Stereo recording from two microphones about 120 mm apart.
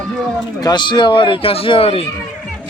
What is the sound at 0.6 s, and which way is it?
Speech, 35° left (ahead or behind).